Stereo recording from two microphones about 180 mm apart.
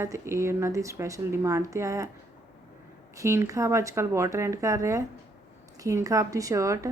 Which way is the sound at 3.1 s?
15° right (ahead or behind).